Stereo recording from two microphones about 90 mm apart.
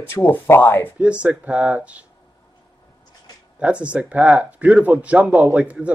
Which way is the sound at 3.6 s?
15° right (ahead or behind).